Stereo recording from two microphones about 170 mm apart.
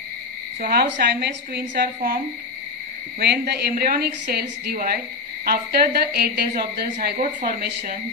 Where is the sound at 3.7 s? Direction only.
60° right (ahead or behind).